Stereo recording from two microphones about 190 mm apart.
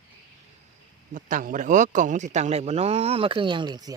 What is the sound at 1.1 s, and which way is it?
A man's voice, 45° right (ahead or behind).